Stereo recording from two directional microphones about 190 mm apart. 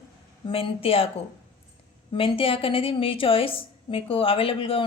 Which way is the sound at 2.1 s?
30° left (ahead or behind).